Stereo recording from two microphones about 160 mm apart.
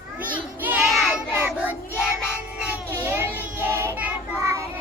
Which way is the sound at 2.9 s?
15° right (ahead or behind).